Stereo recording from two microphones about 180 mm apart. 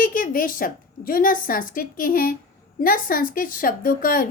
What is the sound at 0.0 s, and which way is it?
A woman's voice, 50° left (ahead or behind).